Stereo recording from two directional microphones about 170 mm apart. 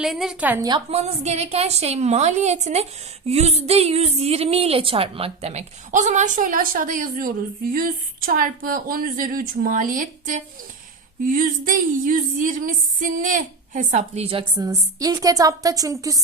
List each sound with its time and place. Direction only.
0.0 s a woman's voice: centre (ahead or behind)
0.9 s a woman's voice: 40° right (ahead or behind)
11.3 s a sound: 55° right (ahead or behind); by 14.4 s 35° right (ahead or behind)
14.6 s a woman's voice: 20° right (ahead or behind)